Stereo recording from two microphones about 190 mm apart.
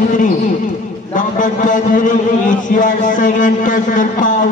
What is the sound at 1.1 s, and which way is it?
A man's voice, 45° left (ahead or behind).